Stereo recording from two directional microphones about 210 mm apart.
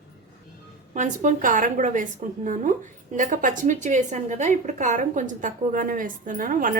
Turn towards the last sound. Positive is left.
turn(degrees=-40)  # may be behind; listen again after turning